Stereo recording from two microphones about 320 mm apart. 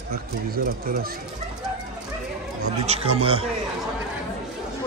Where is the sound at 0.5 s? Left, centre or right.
Right.